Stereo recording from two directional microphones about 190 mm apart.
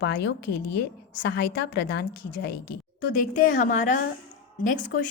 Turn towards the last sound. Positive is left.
turn(degrees=45)  # may be behind; listen again after turning